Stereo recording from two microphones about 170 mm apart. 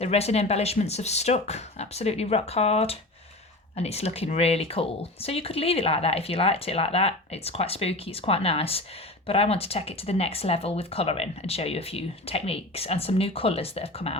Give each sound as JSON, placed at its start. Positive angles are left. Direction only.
{"t": 0.0, "sound": "speech", "side_deg": 35}